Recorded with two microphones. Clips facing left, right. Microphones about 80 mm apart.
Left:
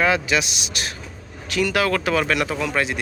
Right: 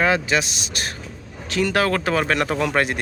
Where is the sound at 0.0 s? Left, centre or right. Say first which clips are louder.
Even; right.